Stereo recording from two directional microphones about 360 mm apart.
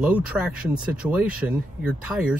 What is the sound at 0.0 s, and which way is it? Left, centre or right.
Speech, centre.